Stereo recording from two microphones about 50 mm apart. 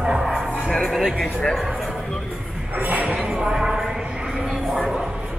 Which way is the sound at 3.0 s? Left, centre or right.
Centre.